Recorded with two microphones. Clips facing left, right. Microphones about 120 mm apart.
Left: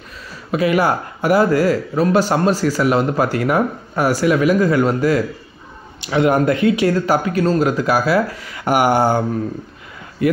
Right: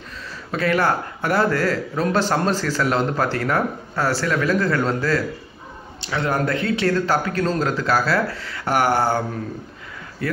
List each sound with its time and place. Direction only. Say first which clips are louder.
0.5 s speech: left 4 dB; 10° left (ahead or behind)
10.2 s speech: left 8 dB; 15° left (ahead or behind)